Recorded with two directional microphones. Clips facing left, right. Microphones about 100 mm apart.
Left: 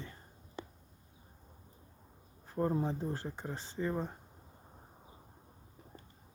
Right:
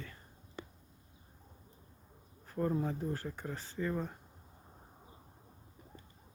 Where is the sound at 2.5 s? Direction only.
25° left (ahead or behind).